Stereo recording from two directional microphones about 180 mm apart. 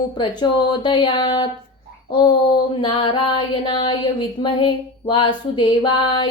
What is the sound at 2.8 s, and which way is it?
Female singing, 25° left (ahead or behind).